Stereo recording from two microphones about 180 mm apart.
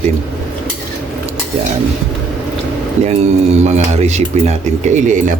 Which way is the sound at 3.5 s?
40° right (ahead or behind).